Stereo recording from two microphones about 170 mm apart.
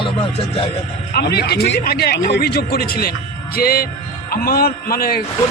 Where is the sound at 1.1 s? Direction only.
70° left (ahead or behind).